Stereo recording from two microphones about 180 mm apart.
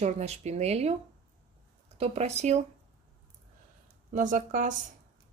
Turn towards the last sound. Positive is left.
turn(degrees=-45)  # may be behind; listen again after turning